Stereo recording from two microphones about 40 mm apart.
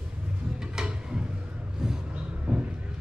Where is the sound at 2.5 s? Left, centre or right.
Right.